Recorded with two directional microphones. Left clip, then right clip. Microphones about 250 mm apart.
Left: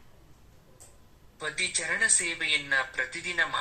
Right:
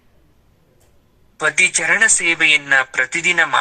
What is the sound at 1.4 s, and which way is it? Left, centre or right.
Speech, right.